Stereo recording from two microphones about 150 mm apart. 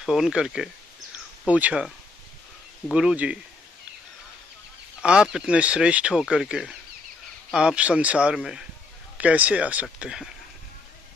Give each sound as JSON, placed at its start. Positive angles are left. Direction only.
{"t": 0.0, "sound": "speech", "side_deg": 0}
{"t": 2.9, "sound": "speech", "side_deg": -5}
{"t": 5.0, "sound": "speech", "side_deg": -5}